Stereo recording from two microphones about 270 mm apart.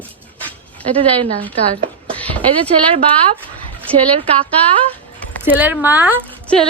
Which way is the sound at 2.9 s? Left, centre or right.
Right.